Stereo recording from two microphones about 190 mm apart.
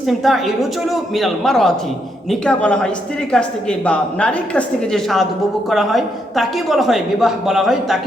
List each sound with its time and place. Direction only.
0.1 s a woman's voice: centre (ahead or behind)